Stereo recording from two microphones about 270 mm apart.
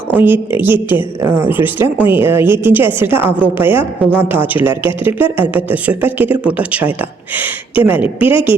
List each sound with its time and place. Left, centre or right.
0.2 s a woman's voice: centre
8.2 s a woman's voice: centre